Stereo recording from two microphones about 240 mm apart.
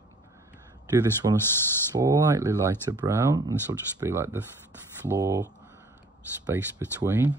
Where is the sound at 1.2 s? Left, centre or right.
Right.